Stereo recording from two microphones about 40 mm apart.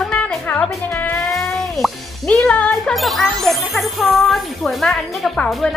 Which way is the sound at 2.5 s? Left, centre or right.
Left.